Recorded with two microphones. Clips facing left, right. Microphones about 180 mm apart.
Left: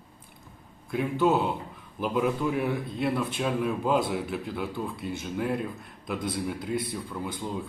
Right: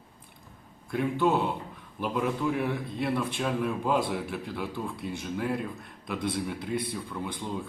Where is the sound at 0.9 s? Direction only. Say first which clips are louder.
Left 1 dB; centre (ahead or behind).